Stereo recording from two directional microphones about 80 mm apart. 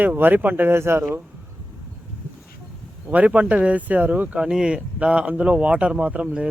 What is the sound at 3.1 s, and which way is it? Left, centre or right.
Speech, centre.